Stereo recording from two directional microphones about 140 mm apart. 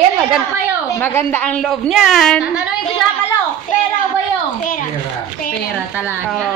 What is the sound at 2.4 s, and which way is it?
Speech, 10° right (ahead or behind).